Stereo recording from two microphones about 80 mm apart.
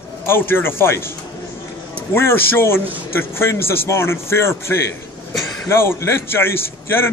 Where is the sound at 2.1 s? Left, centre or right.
Left.